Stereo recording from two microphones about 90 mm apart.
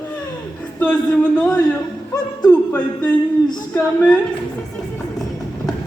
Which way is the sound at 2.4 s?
15° left (ahead or behind).